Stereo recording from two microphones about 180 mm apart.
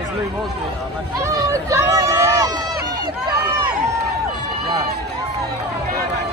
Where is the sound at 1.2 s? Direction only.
15° right (ahead or behind).